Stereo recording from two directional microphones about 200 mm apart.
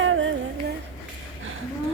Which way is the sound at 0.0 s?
75° right (ahead or behind).